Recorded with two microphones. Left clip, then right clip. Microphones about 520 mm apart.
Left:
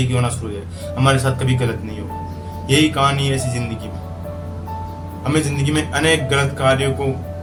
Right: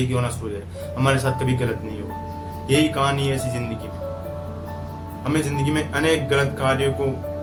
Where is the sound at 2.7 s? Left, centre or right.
Right.